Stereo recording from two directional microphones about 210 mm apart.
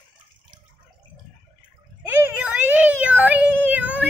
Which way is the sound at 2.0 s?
10° right (ahead or behind).